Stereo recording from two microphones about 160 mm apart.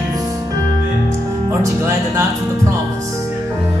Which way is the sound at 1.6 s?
20° right (ahead or behind).